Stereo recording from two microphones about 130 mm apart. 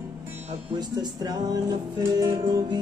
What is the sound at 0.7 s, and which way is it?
Speech, 30° right (ahead or behind).